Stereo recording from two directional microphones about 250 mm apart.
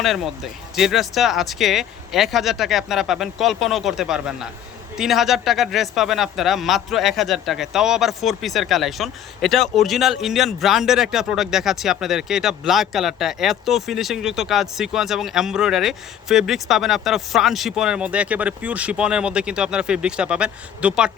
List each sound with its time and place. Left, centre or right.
0.0 s speech: centre